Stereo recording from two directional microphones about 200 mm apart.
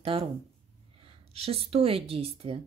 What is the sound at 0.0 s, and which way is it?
Speech, 25° right (ahead or behind).